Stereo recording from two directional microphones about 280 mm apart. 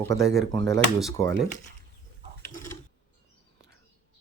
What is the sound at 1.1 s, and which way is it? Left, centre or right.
Speech, centre.